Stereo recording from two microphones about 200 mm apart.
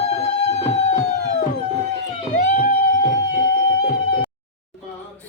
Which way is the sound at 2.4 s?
45° left (ahead or behind).